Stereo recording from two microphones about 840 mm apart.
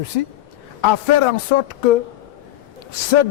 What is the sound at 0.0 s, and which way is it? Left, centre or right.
Speech, left.